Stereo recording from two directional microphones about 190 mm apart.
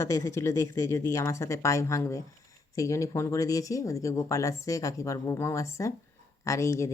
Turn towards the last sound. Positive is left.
turn(degrees=15)  # may be behind; listen again after turning